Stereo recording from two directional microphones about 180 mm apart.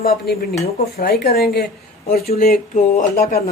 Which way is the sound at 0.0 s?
55° left (ahead or behind).